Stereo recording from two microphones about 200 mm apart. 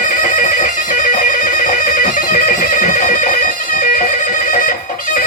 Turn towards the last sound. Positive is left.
turn(degrees=40)  # may be behind; listen again after turning